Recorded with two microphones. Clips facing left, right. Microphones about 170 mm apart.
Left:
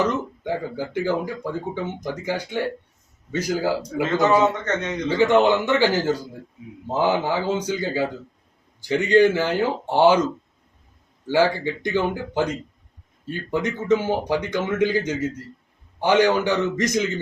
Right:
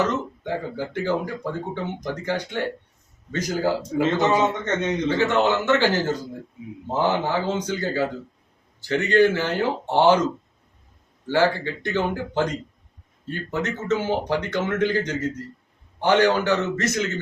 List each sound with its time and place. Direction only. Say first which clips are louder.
0.0 s speech: left 1 dB; 10° left (ahead or behind)
4.6 s a man's voice: right 2 dB; 25° right (ahead or behind)
5.0 s speech: left 5 dB; 15° left (ahead or behind)
11.3 s speech: left 1 dB; 10° left (ahead or behind)